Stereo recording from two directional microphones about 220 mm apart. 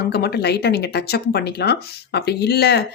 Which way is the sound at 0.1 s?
50° left (ahead or behind).